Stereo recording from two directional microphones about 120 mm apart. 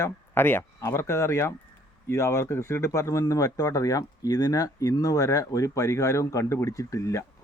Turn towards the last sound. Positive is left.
turn(degrees=25)  # may be behind; listen again after turning